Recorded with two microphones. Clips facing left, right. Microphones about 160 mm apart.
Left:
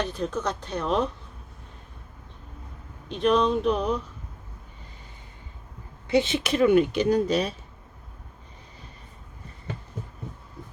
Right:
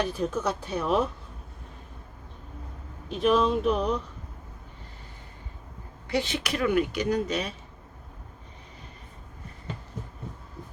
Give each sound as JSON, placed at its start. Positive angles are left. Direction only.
{"t": 0.0, "sound": "speech", "side_deg": -10}
{"t": 3.1, "sound": "speech", "side_deg": -5}
{"t": 6.1, "sound": "speech", "side_deg": 20}